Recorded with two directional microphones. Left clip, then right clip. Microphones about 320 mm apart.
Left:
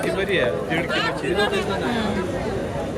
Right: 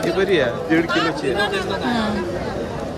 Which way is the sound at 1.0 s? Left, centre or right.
Right.